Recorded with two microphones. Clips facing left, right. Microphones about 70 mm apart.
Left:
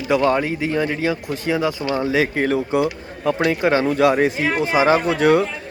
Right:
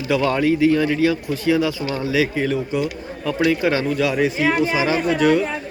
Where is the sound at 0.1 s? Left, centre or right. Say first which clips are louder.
Even; left.